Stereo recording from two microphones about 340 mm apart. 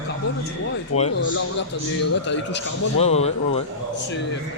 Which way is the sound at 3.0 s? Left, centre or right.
Centre.